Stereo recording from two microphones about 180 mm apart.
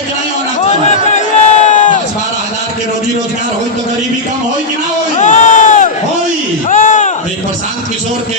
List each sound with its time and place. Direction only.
1.1 s crowd: 40° left (ahead or behind)
5.1 s crowd: 45° left (ahead or behind)
6.7 s a sound: 45° left (ahead or behind)